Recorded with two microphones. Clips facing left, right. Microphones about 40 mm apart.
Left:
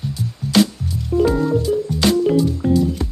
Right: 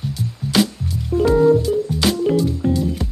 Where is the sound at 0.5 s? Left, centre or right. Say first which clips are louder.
Left 2 dB; centre.